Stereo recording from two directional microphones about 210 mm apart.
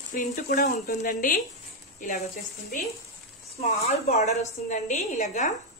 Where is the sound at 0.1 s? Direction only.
40° left (ahead or behind).